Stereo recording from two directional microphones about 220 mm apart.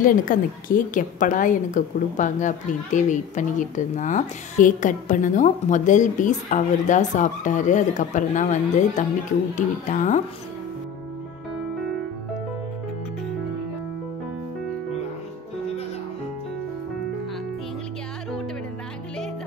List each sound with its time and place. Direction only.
0.0 s a woman's voice: 40° left (ahead or behind)